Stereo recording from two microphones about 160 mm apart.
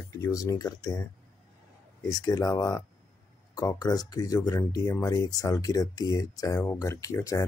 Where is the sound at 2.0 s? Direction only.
20° left (ahead or behind).